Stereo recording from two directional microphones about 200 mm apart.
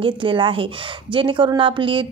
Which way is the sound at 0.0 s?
25° right (ahead or behind).